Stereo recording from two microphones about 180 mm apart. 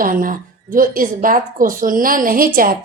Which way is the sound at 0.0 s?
50° right (ahead or behind).